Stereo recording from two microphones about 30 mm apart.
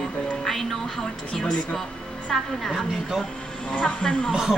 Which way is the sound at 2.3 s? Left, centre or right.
Centre.